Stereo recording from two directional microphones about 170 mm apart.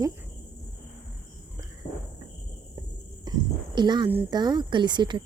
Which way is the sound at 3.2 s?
25° right (ahead or behind).